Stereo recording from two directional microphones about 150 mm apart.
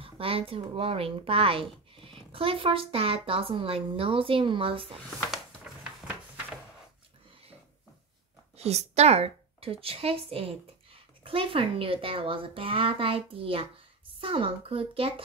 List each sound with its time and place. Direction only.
0.0 s a woman's voice: 40° right (ahead or behind)
5.3 s a sound: 10° right (ahead or behind)
8.5 s a woman's voice: 45° right (ahead or behind)